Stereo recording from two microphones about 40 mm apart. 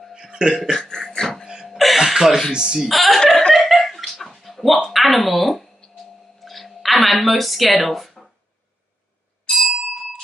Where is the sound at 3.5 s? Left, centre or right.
Centre.